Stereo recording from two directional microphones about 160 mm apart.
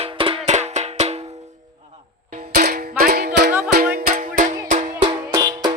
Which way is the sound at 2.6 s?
70° right (ahead or behind).